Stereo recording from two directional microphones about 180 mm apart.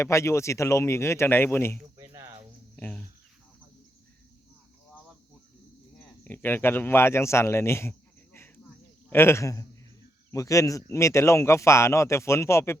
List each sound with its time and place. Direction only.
0.0 s speech: 15° left (ahead or behind)
2.0 s cricket: 15° right (ahead or behind)
2.7 s cricket: 10° left (ahead or behind)
6.2 s speech: 10° left (ahead or behind)